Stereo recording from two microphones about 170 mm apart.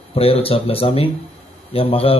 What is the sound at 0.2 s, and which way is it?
Speech, 35° left (ahead or behind).